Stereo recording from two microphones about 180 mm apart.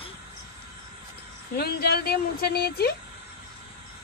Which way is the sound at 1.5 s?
60° left (ahead or behind).